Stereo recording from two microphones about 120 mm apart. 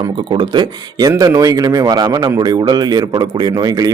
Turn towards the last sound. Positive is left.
turn(degrees=-35)  # may be behind; listen again after turning